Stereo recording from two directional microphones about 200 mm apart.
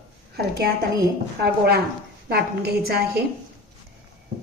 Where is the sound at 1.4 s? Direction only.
55° right (ahead or behind).